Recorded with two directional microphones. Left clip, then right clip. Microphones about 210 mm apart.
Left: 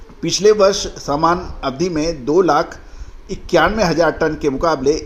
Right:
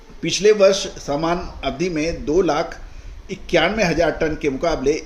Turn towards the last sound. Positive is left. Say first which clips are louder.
# left 4 dB
turn(degrees=25)  # may be behind; listen again after turning